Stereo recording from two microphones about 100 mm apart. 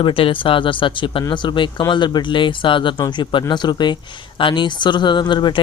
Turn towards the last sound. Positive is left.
turn(degrees=50)  # may be behind; listen again after turning